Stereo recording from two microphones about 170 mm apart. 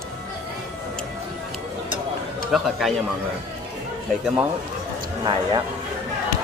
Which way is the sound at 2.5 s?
Centre (ahead or behind).